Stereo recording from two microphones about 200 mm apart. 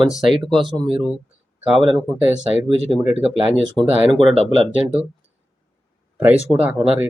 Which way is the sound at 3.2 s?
Centre (ahead or behind).